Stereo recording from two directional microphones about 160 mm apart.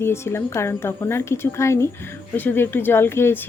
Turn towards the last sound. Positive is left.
turn(degrees=15)  # may be behind; listen again after turning